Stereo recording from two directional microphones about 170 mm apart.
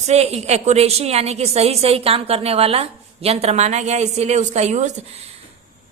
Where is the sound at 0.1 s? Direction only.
40° right (ahead or behind).